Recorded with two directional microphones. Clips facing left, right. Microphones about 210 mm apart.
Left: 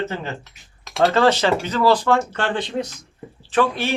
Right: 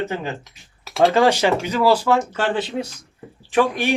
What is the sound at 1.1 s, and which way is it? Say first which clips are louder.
Speech: even; 10° right (ahead or behind).